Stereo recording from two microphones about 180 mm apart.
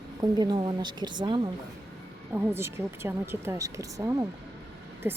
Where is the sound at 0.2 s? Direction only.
20° right (ahead or behind).